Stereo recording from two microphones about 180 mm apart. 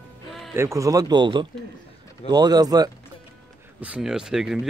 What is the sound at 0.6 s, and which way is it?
Speech, 15° right (ahead or behind).